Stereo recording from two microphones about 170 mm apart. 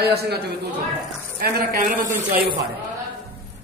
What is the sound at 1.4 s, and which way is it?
Speech, 60° right (ahead or behind).